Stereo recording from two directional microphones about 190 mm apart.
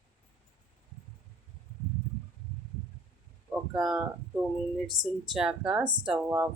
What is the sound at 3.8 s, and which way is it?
Speech, centre (ahead or behind).